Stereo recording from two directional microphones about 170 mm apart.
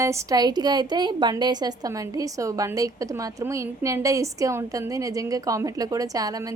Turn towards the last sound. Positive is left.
turn(degrees=-20)  # may be behind; listen again after turning